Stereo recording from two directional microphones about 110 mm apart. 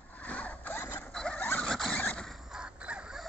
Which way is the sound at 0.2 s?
10° left (ahead or behind).